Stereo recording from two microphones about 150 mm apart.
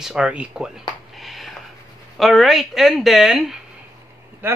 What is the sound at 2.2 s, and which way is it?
Speech, centre (ahead or behind).